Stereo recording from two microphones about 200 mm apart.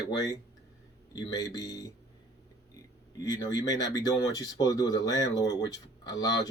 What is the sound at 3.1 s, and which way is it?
Speech, 20° left (ahead or behind).